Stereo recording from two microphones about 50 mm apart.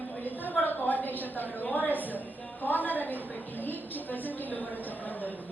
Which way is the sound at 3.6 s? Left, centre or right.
Left.